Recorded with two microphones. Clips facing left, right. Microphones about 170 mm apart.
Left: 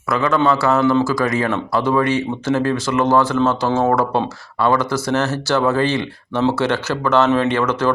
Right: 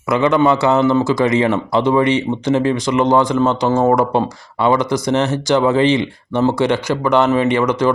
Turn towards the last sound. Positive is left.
turn(degrees=-15)  # may be behind; listen again after turning